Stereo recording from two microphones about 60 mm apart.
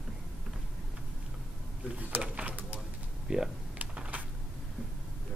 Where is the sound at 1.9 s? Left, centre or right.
Right.